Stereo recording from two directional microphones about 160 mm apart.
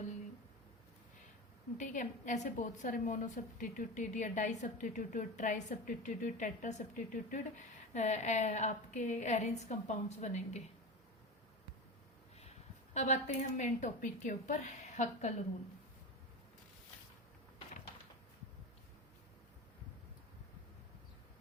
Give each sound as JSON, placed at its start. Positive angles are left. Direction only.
{"t": 1.8, "sound": "a woman's voice", "side_deg": 55}
{"t": 12.4, "sound": "speech", "side_deg": 45}